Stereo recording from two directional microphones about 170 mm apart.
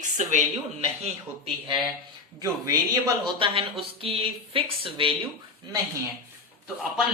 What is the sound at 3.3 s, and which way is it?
Speech, 30° right (ahead or behind).